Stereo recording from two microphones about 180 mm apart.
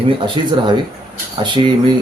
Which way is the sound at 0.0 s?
30° right (ahead or behind).